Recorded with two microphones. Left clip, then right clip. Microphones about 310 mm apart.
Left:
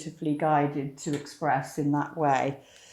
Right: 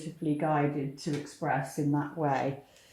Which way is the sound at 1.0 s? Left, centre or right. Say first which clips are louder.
Left 3 dB; centre.